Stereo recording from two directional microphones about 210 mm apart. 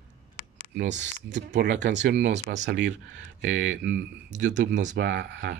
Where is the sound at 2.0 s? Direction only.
55° right (ahead or behind).